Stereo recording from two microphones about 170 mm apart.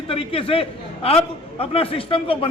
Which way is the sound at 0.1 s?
35° left (ahead or behind).